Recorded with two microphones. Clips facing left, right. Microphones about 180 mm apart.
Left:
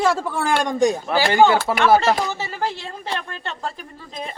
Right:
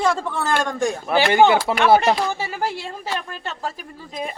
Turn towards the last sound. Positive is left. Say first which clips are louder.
# even
turn(degrees=-5)  # may be behind; listen again after turning